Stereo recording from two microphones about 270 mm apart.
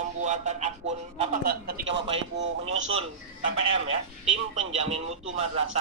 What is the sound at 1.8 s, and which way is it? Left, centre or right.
Speech, right.